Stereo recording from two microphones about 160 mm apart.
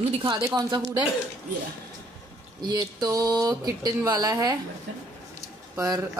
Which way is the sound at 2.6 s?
25° right (ahead or behind).